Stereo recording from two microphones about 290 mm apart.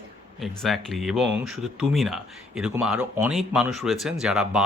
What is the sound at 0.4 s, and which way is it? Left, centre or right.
Speech, centre.